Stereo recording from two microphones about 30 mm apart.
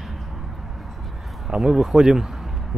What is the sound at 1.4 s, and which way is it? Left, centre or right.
Speech, right.